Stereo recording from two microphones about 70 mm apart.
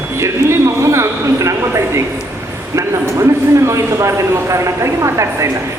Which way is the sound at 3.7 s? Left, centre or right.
Right.